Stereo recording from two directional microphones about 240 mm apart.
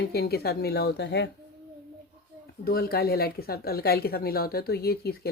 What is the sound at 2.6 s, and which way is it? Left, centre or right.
Speech, left.